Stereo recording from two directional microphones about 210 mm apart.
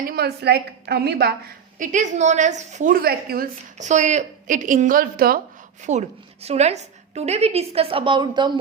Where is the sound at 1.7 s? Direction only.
35° right (ahead or behind).